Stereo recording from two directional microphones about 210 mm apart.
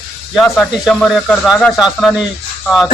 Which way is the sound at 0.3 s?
Centre (ahead or behind).